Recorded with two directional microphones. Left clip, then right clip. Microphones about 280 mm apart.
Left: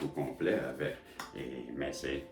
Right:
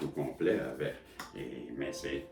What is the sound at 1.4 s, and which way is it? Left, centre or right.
Speech, centre.